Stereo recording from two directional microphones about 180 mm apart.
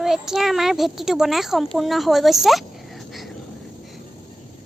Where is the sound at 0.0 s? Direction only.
Centre (ahead or behind).